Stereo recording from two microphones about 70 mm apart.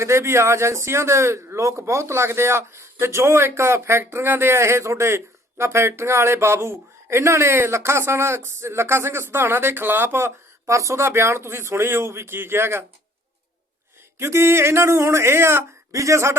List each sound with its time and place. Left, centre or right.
0.0 s a man's voice: right
14.2 s a man's voice: right